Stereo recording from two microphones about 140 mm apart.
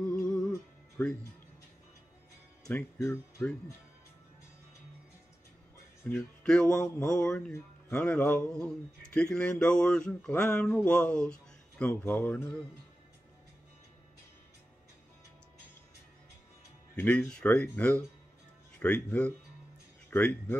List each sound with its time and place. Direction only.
0.0 s music: 10° left (ahead or behind)
1.0 s speech: 15° left (ahead or behind)
2.7 s speech: 20° left (ahead or behind)
6.0 s speech: 10° left (ahead or behind)
6.4 s music: 5° left (ahead or behind)
7.1 s speech: 5° left (ahead or behind)
17.0 s speech: 10° left (ahead or behind)